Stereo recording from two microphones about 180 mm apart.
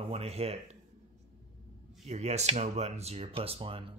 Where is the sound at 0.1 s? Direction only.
35° right (ahead or behind).